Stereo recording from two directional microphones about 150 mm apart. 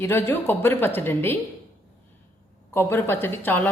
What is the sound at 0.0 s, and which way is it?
Speech, 15° left (ahead or behind).